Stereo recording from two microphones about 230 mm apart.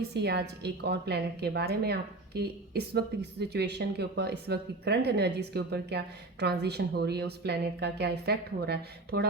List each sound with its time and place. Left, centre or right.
0.1 s a woman's voice: right